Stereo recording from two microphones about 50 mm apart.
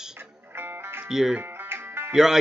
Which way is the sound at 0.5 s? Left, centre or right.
Right.